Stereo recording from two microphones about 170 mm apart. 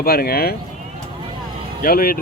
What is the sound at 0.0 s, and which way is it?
Speech, 65° left (ahead or behind).